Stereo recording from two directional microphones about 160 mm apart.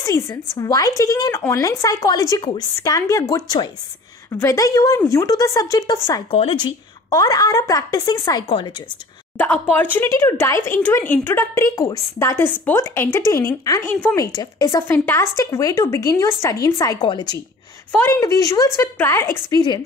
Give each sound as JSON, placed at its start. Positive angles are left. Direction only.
{"t": 0.0, "sound": "speech", "side_deg": 20}
{"t": 9.4, "sound": "a woman's voice", "side_deg": 10}
{"t": 17.9, "sound": "a woman's voice", "side_deg": 15}